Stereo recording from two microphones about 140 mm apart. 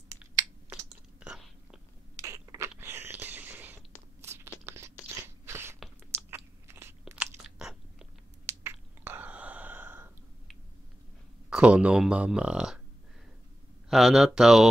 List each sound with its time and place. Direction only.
0.8 s whispering: 5° right (ahead or behind)
2.1 s a sound: 20° right (ahead or behind)
6.3 s crunch: 20° right (ahead or behind)
7.4 s chewing: 5° right (ahead or behind)
8.5 s a sound: 15° right (ahead or behind)
11.5 s speech: 10° right (ahead or behind)
13.8 s speech: centre (ahead or behind)